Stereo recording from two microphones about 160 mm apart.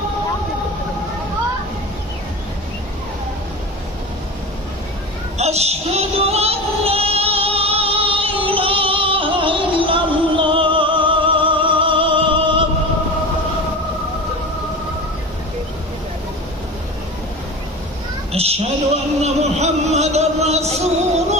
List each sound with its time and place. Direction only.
5.4 s female singing: 40° right (ahead or behind)
18.3 s a sound: 40° right (ahead or behind)
19.2 s music: 45° right (ahead or behind)